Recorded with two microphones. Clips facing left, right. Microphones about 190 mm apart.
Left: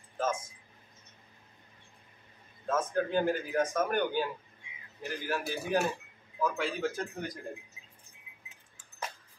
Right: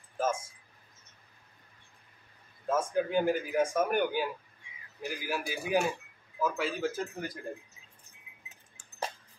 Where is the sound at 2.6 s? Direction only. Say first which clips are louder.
Right 1 dB; 10° right (ahead or behind).